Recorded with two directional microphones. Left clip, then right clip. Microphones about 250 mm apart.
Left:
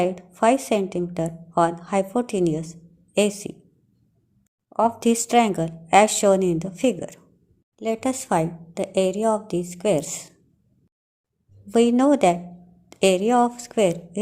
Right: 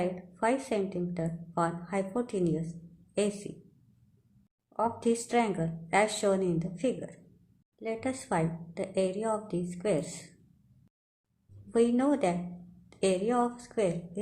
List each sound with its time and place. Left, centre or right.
0.0 s speech: left
4.8 s speech: left
11.7 s speech: left